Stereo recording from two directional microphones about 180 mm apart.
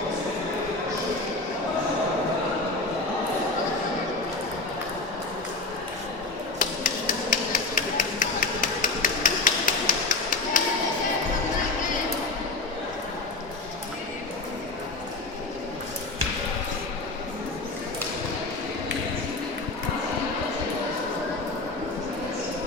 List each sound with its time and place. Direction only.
6.6 s hammer: 45° left (ahead or behind)